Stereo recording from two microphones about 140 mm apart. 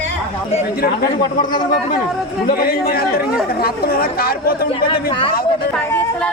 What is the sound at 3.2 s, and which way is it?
Speech, 5° right (ahead or behind).